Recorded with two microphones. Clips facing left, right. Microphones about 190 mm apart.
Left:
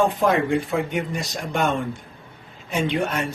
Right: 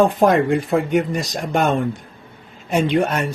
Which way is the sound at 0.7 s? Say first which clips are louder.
Right 6 dB; 40° right (ahead or behind).